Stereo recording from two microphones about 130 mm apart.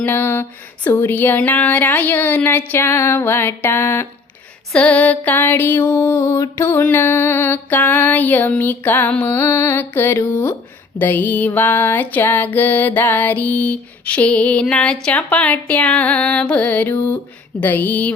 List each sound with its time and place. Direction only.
0.0 s music: 15° left (ahead or behind)